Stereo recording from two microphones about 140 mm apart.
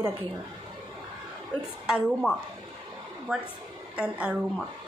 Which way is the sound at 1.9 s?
5° right (ahead or behind).